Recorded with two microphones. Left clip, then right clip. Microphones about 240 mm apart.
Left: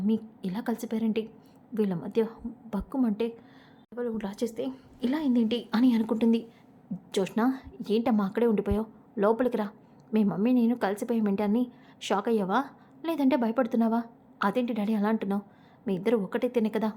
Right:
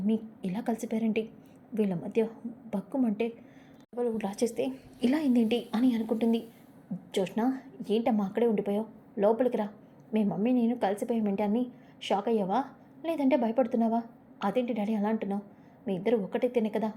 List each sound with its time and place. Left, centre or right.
0.1 s a woman's voice: centre
4.3 s a woman's voice: left
4.5 s a woman's voice: centre
5.7 s a woman's voice: centre